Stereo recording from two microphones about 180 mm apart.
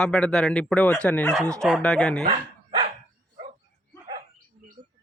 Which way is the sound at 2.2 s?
30° right (ahead or behind).